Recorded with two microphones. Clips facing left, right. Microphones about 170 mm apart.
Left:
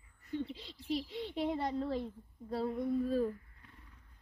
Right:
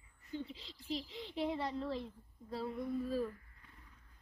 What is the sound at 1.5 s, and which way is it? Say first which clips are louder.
Speech: left 3 dB; 45° left (ahead or behind).